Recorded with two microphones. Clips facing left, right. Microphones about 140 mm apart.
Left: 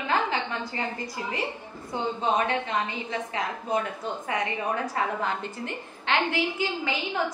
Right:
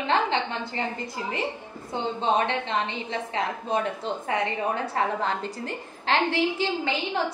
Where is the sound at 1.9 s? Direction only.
30° right (ahead or behind).